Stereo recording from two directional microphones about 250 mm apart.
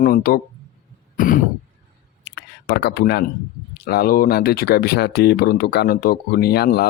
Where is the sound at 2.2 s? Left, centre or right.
Left.